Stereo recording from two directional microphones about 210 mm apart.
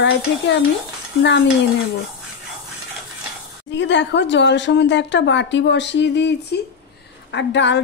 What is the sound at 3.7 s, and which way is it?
A woman's voice, 60° left (ahead or behind).